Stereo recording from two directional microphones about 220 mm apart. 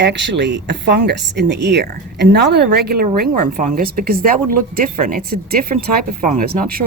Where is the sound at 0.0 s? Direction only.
55° right (ahead or behind).